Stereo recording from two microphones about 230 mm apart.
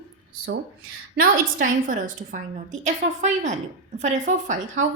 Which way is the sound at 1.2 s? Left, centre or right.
Right.